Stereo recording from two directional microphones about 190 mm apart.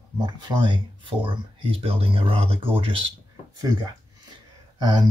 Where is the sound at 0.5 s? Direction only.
25° right (ahead or behind).